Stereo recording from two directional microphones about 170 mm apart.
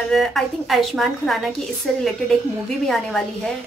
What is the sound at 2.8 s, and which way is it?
Speech, centre (ahead or behind).